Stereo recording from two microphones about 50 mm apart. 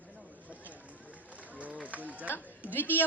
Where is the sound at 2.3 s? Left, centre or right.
Left.